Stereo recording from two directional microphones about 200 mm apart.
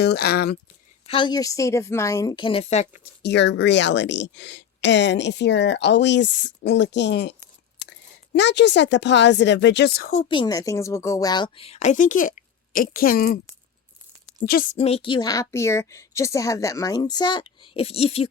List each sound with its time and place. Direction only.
0.0 s speech: 55° left (ahead or behind)
1.0 s a woman's voice: 25° left (ahead or behind)
3.0 s speech: 60° left (ahead or behind)
8.4 s speech: 60° left (ahead or behind)
10.1 s speech: 30° left (ahead or behind); by 13.4 s 50° left (ahead or behind)
14.4 s speech: 50° left (ahead or behind)
14.8 s a woman's voice: 30° left (ahead or behind)